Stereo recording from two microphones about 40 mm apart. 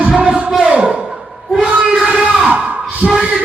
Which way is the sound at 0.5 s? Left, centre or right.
Right.